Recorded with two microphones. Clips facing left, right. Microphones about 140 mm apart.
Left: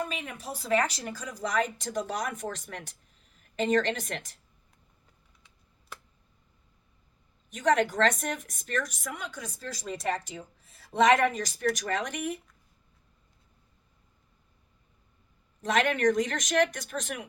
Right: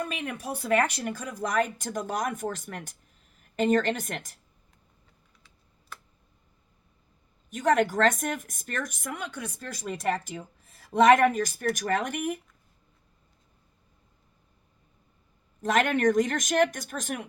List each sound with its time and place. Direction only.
0.0 s a woman's voice: 60° right (ahead or behind)
7.5 s a woman's voice: 45° right (ahead or behind)
15.6 s a woman's voice: 45° right (ahead or behind)